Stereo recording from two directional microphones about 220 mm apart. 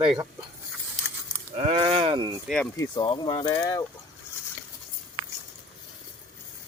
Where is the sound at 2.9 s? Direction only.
20° left (ahead or behind).